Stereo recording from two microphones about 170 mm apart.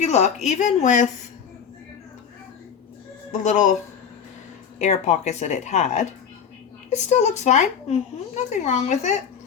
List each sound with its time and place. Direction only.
0.0 s speech: 40° left (ahead or behind)
3.3 s speech: 45° left (ahead or behind)
4.8 s speech: 40° left (ahead or behind)